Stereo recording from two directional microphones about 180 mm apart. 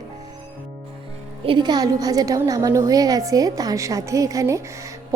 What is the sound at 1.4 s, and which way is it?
A woman's voice, 25° right (ahead or behind).